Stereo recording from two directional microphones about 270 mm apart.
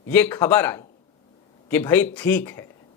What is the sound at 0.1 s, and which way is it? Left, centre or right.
Speech, centre.